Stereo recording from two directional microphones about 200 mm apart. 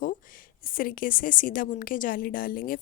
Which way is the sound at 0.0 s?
45° left (ahead or behind).